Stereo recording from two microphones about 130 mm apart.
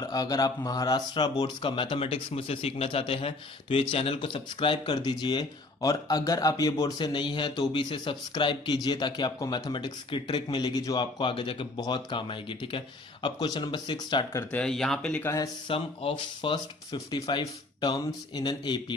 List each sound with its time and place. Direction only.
0.0 s speech: 30° left (ahead or behind)
14.5 s speech: 5° left (ahead or behind)
15.2 s speech: 25° left (ahead or behind)
15.7 s speech: 45° left (ahead or behind)